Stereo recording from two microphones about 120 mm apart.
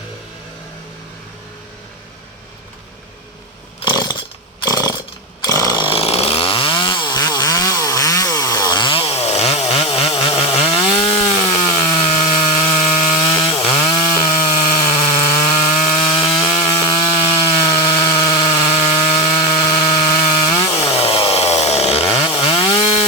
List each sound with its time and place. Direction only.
3.8 s chainsaw: 35° left (ahead or behind)
4.6 s a sound: 30° left (ahead or behind)
5.5 s chainsaw: 30° left (ahead or behind)
5.8 s chainsaw: 50° left (ahead or behind); by 11.9 s 35° left (ahead or behind)
11.9 s chainsaw: 45° left (ahead or behind)
14.5 s a sound: 40° left (ahead or behind)
14.9 s a sound: 55° left (ahead or behind)
15.3 s wood: 35° left (ahead or behind)
20.8 s chainsaw: 55° left (ahead or behind)
22.4 s chainsaw: 45° left (ahead or behind)